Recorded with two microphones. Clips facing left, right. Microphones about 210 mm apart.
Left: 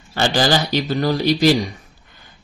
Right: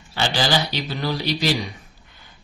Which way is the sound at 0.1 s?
45° left (ahead or behind).